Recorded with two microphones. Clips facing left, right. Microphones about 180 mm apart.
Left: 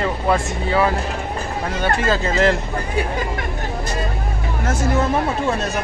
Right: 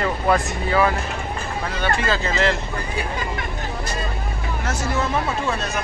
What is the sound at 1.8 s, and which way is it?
Speech, 45° left (ahead or behind).